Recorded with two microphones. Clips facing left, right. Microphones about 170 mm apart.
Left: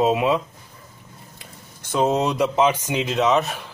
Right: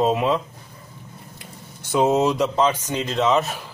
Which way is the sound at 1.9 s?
5° right (ahead or behind).